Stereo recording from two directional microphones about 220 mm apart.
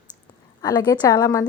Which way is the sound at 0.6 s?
20° left (ahead or behind).